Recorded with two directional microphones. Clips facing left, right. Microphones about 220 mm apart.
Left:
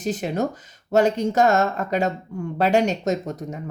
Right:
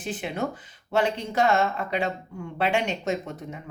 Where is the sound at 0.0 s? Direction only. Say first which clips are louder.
Left 6 dB; 40° left (ahead or behind).